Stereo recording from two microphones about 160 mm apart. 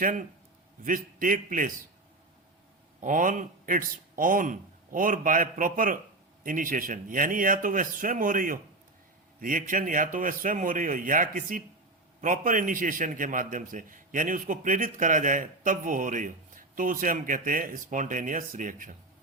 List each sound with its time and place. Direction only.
0.0 s a man's voice: 55° right (ahead or behind)
3.0 s a man's voice: 55° right (ahead or behind)